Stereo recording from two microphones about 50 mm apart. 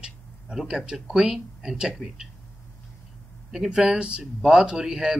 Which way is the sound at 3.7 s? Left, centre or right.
Centre.